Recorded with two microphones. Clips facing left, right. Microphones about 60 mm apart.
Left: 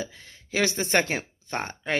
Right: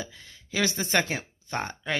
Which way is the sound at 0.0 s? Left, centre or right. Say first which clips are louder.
Left 3 dB; left.